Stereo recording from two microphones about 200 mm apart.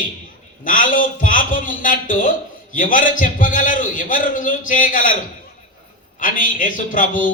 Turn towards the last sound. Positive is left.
turn(degrees=40)  # may be behind; listen again after turning